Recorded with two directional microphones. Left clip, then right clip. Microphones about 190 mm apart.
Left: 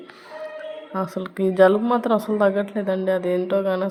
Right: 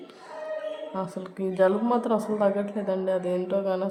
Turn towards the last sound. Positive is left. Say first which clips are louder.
# left 5 dB
turn(degrees=15)  # may be behind; listen again after turning